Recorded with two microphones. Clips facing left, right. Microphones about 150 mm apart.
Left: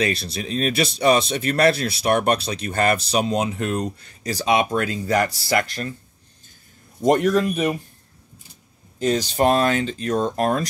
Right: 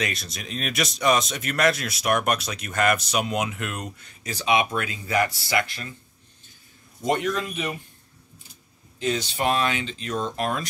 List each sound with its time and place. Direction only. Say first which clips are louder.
0.0 s speech: left 7 dB; 30° left (ahead or behind)
7.1 s speech: left 7 dB; 45° left (ahead or behind)
9.0 s speech: left 6 dB; 40° left (ahead or behind)